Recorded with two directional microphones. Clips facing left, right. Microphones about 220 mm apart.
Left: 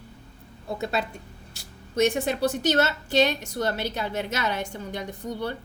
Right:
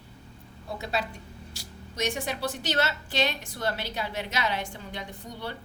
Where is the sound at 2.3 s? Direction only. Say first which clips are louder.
Left 7 dB; 50° left (ahead or behind).